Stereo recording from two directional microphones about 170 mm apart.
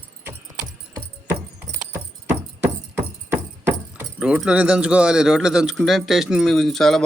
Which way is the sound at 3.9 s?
5° right (ahead or behind).